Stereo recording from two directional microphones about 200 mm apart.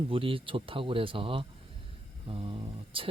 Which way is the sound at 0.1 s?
25° right (ahead or behind).